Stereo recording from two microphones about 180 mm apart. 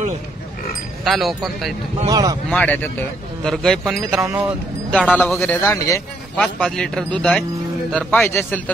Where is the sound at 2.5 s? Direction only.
10° left (ahead or behind).